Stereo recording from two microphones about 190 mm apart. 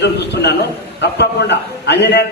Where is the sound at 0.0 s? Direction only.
65° left (ahead or behind).